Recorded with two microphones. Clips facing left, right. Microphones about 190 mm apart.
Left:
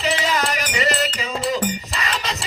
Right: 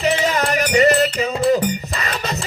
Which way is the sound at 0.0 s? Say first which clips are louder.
Right 3 dB; 50° right (ahead or behind).